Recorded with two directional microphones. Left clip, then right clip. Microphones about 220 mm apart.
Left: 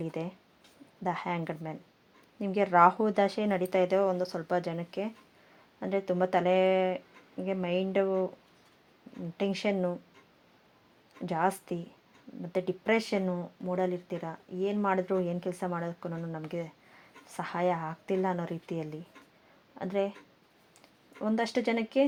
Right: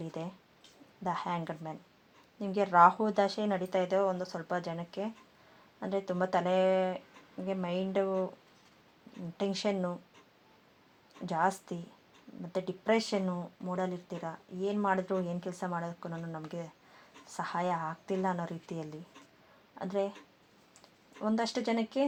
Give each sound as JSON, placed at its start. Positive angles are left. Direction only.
{"t": 0.0, "sound": "speech", "side_deg": 35}
{"t": 6.1, "sound": "speech", "side_deg": 35}
{"t": 9.4, "sound": "speech", "side_deg": 35}
{"t": 11.3, "sound": "speech", "side_deg": 35}
{"t": 21.2, "sound": "speech", "side_deg": 30}